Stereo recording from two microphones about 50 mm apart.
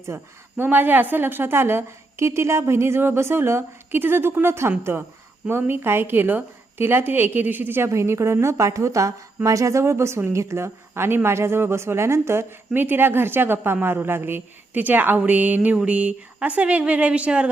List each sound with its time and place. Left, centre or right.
0.1 s a woman's voice: right
7.9 s a woman's voice: right
12.7 s a woman's voice: right